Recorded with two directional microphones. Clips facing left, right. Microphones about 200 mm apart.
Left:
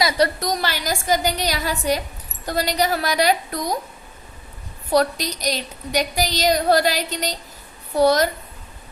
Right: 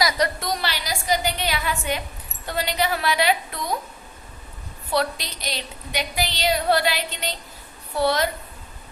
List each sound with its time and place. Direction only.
0.0 s a woman's voice: 35° left (ahead or behind)
4.9 s a woman's voice: 40° left (ahead or behind)